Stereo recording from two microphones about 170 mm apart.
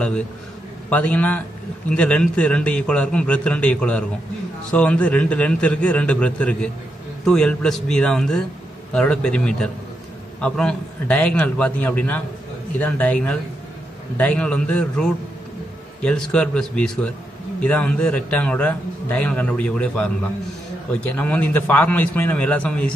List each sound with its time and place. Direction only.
0.8 s a man's voice: 10° left (ahead or behind)